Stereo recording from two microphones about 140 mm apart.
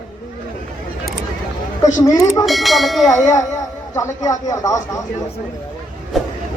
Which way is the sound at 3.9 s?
20° left (ahead or behind).